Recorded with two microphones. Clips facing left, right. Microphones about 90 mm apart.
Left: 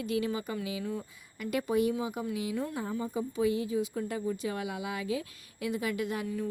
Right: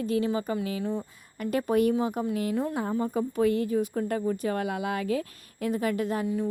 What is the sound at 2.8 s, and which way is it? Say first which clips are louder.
A woman's voice: right 6 dB; 60° right (ahead or behind).